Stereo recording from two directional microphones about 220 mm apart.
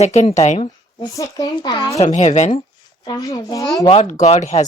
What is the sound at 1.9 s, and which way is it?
Speech, 30° left (ahead or behind).